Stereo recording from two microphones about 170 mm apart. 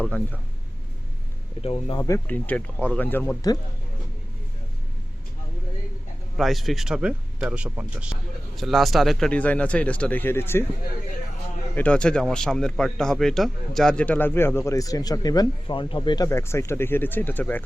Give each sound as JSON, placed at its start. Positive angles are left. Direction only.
{"t": 0.0, "sound": "speech", "side_deg": 10}
{"t": 1.6, "sound": "speech", "side_deg": 30}
{"t": 2.0, "sound": "speech", "side_deg": 15}
{"t": 6.3, "sound": "speech", "side_deg": 0}
{"t": 11.7, "sound": "speech", "side_deg": 5}